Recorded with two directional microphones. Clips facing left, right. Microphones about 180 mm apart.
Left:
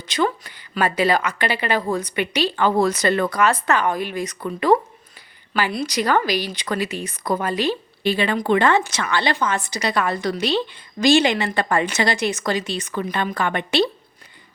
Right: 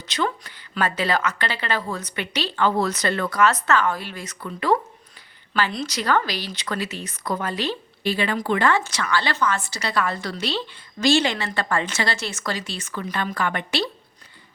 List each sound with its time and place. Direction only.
0.0 s a woman's voice: 10° left (ahead or behind)